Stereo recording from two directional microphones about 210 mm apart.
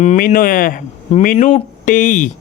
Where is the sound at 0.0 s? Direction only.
35° left (ahead or behind).